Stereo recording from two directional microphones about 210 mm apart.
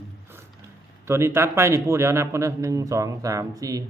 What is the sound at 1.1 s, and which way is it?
Speech, 10° right (ahead or behind).